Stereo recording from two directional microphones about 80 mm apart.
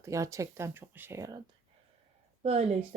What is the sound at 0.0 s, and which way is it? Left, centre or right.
Speech, right.